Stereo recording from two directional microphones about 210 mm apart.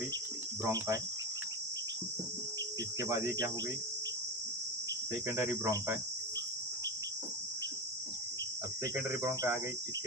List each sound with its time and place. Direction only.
0.6 s cricket: 15° right (ahead or behind)
3.0 s cricket: 15° right (ahead or behind)
5.4 s cricket: 10° right (ahead or behind)
8.8 s cricket: 15° right (ahead or behind)